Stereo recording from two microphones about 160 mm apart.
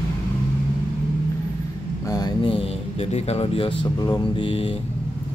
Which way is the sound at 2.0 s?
25° left (ahead or behind).